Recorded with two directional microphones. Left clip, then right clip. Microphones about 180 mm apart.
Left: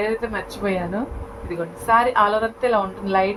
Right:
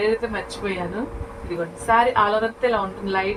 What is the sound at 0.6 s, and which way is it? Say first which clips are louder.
Speech: left 5 dB; 45° left (ahead or behind).